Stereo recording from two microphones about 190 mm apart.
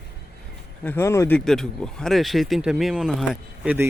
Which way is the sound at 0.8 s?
10° left (ahead or behind).